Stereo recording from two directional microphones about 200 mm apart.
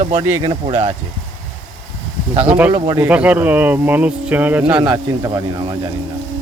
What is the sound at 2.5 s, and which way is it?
Speech, 5° right (ahead or behind).